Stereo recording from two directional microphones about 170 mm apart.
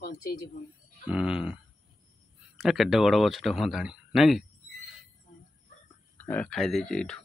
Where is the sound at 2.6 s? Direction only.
Centre (ahead or behind).